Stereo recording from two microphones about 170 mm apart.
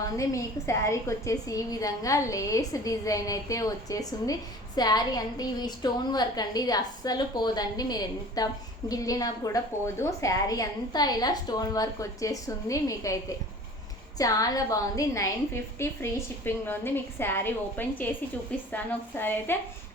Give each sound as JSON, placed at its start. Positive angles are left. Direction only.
{"t": 0.0, "sound": "a woman's voice", "side_deg": 20}
{"t": 14.2, "sound": "a woman's voice", "side_deg": 20}